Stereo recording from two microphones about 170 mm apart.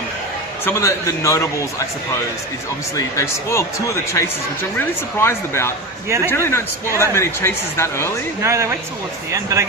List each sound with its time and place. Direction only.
0.6 s speech: 15° left (ahead or behind)
2.9 s speech: 15° left (ahead or behind)
6.1 s speech: 15° right (ahead or behind)
6.3 s speech: 15° left (ahead or behind)
8.4 s speech: 15° right (ahead or behind)